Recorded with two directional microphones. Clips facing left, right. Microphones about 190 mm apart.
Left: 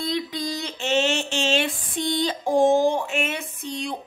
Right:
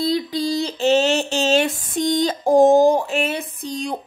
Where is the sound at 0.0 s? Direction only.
35° right (ahead or behind).